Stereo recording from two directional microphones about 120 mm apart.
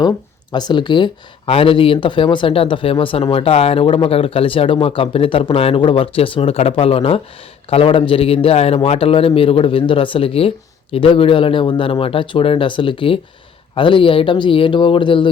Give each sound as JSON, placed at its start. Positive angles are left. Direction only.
{"t": 0.5, "sound": "speech", "side_deg": 40}